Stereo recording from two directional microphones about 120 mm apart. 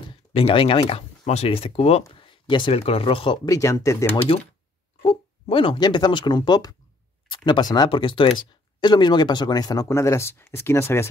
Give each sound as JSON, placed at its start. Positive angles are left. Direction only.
{"t": 0.3, "sound": "speech", "side_deg": 55}
{"t": 2.1, "sound": "a sound", "side_deg": 45}
{"t": 2.7, "sound": "speech", "side_deg": 55}
{"t": 3.4, "sound": "speech", "side_deg": 25}
{"t": 5.0, "sound": "speech", "side_deg": 45}